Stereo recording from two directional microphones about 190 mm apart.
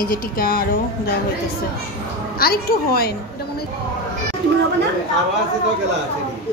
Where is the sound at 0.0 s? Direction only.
50° left (ahead or behind).